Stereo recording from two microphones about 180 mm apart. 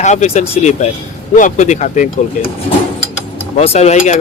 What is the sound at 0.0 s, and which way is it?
Speech, 40° left (ahead or behind).